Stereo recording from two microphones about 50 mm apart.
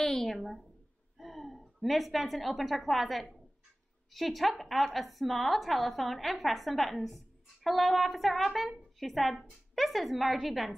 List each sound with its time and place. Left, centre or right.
0.0 s a woman's voice: centre